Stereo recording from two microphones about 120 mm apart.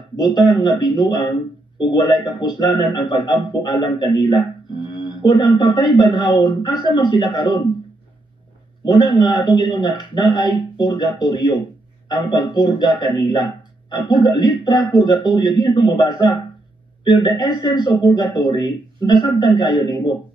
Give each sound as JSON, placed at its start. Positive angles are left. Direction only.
{"t": 0.1, "sound": "speech", "side_deg": 40}
{"t": 8.8, "sound": "speech", "side_deg": 40}